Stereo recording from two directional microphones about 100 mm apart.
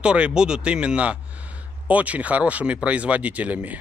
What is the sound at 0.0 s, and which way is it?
Speech, 10° right (ahead or behind).